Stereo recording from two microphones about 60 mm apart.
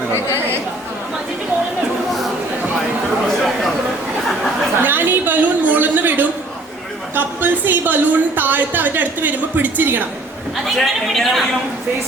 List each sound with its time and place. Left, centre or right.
3.2 s chatter: centre
4.8 s a sound: right
7.2 s a woman's voice: right
10.7 s speech: centre